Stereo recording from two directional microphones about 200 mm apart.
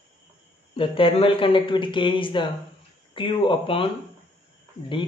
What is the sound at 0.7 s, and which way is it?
Speech, 25° left (ahead or behind).